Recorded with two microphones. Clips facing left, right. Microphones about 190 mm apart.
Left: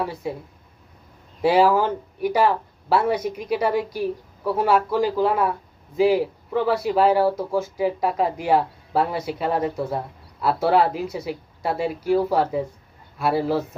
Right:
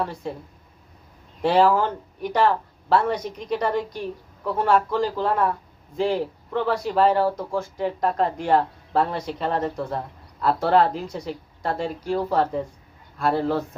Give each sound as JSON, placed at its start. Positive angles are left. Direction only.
{"t": 0.0, "sound": "speech", "side_deg": 5}
{"t": 1.4, "sound": "speech", "side_deg": 10}